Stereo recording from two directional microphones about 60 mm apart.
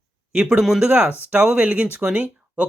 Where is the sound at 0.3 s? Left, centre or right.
Right.